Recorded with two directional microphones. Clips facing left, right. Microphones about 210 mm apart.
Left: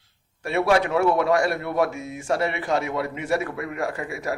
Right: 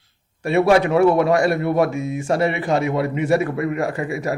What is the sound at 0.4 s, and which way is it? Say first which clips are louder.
Speech: right 5 dB; 15° right (ahead or behind).